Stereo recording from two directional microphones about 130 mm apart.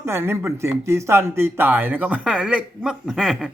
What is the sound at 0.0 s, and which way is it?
Speech, 20° right (ahead or behind).